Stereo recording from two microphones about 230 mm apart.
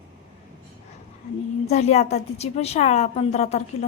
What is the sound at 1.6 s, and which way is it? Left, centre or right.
A woman's voice, left.